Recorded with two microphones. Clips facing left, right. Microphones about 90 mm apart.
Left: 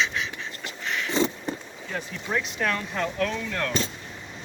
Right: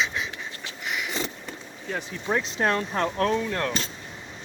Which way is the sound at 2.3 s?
30° right (ahead or behind).